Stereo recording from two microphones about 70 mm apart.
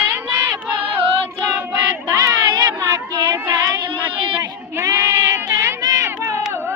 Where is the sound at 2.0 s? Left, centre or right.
Right.